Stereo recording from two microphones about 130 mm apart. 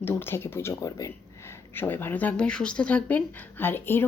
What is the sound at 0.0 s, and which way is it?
Speech, 15° left (ahead or behind).